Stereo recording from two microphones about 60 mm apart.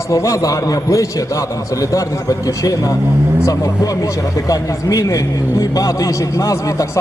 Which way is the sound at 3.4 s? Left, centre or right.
Left.